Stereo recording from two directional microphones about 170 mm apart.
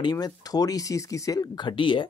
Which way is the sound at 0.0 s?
25° left (ahead or behind).